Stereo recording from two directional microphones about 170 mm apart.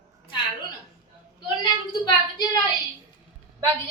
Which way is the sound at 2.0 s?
25° left (ahead or behind).